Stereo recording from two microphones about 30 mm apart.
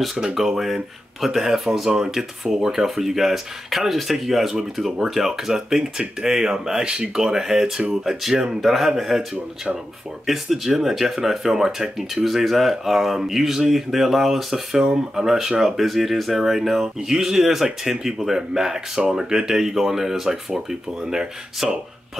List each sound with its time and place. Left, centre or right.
0.2 s speech: centre
1.9 s speech: right
5.5 s speech: right
14.8 s speech: right
15.2 s speech: centre